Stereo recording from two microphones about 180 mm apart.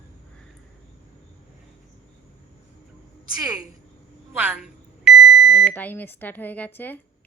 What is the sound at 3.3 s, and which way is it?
Speech, 20° right (ahead or behind).